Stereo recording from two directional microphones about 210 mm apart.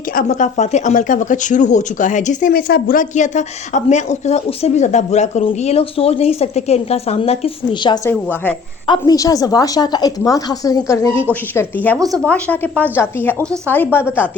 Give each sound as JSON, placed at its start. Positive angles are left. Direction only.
{"t": 0.2, "sound": "speech", "side_deg": 35}
{"t": 8.1, "sound": "a woman's voice", "side_deg": 10}